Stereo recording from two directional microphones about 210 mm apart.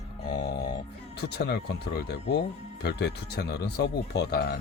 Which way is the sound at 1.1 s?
50° left (ahead or behind).